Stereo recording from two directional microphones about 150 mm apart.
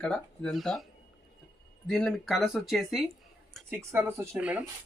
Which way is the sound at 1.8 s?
Centre (ahead or behind).